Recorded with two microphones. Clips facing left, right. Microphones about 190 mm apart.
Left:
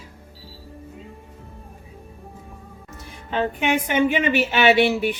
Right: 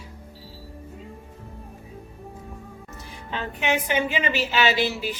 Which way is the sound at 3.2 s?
55° left (ahead or behind).